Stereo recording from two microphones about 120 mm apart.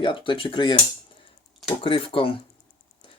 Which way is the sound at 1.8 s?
50° left (ahead or behind).